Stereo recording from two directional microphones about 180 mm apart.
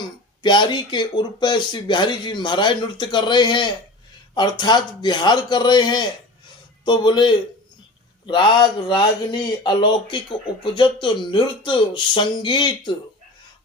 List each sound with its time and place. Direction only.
0.0 s speech: 25° left (ahead or behind)